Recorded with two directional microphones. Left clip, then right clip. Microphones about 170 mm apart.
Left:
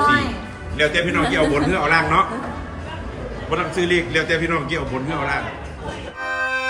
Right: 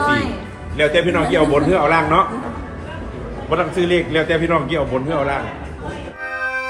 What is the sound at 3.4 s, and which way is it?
A man's voice, 5° left (ahead or behind).